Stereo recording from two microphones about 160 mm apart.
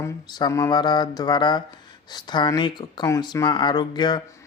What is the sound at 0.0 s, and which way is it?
Speech, 25° left (ahead or behind).